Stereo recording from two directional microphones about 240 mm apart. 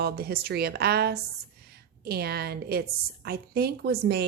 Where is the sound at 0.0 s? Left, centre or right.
Right.